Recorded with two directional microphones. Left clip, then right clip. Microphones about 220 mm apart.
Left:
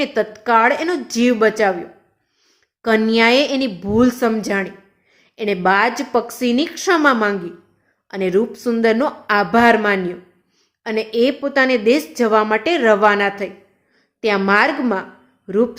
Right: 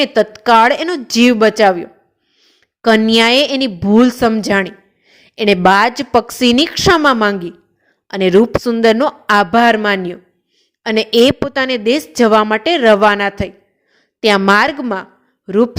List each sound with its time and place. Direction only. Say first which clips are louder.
0.0 s a woman's voice: right 6 dB; 35° right (ahead or behind)